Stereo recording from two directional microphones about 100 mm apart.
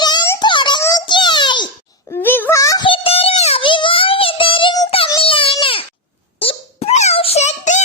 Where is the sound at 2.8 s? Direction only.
65° left (ahead or behind).